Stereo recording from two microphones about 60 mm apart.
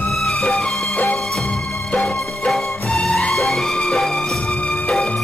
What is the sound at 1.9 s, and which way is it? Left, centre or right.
Music, centre.